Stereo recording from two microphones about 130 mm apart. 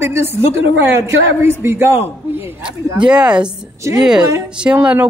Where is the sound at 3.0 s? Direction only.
5° right (ahead or behind).